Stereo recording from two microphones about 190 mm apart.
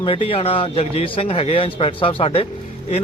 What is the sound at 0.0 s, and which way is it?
A man's voice, 30° left (ahead or behind).